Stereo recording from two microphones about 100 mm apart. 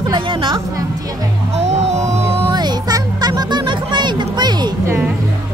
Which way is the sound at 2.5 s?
45° right (ahead or behind).